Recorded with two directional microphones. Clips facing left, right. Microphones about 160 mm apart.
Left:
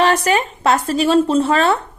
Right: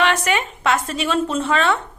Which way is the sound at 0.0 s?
35° left (ahead or behind).